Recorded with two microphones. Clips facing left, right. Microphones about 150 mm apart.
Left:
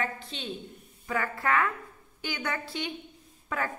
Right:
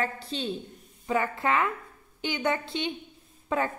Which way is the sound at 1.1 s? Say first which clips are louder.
Right 3 dB; 20° right (ahead or behind).